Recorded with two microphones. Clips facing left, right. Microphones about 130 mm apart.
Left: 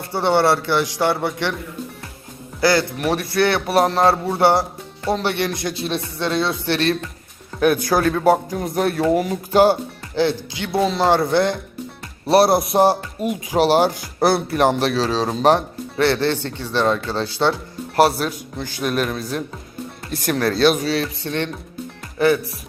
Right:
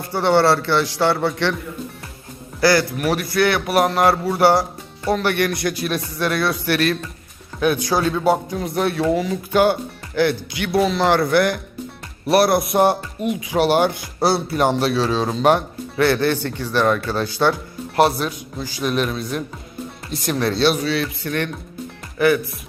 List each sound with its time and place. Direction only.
0.1 s a man's voice: 20° left (ahead or behind)
2.6 s speech: 20° left (ahead or behind)
7.6 s speech: 50° left (ahead or behind)
10.2 s speech: 25° left (ahead or behind)
13.3 s speech: 40° left (ahead or behind); by 17.5 s 25° left (ahead or behind)
18.5 s speech: 55° left (ahead or behind); by 19.4 s 40° left (ahead or behind)
20.1 s speech: 50° left (ahead or behind); by 22.3 s 30° left (ahead or behind)